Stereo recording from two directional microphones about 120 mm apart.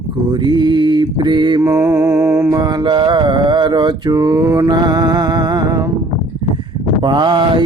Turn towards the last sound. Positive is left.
turn(degrees=-40)  # may be behind; listen again after turning